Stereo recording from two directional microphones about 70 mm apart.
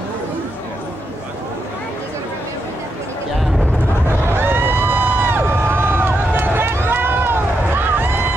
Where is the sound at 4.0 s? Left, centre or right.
Right.